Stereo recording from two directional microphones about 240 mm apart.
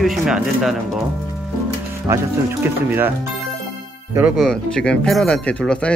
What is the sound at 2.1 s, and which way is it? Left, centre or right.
Speech, centre.